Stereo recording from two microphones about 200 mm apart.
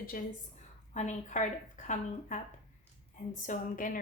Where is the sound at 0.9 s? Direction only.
35° left (ahead or behind).